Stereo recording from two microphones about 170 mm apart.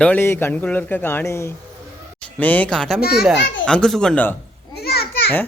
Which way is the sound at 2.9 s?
65° left (ahead or behind).